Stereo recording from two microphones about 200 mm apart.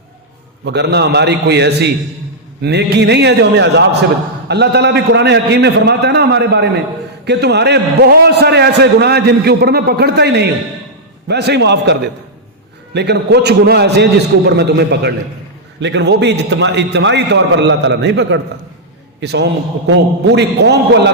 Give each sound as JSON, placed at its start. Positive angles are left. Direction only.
{"t": 0.6, "sound": "a man's voice", "side_deg": -55}